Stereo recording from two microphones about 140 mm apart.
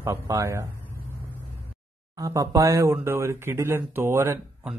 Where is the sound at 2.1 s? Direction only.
25° right (ahead or behind).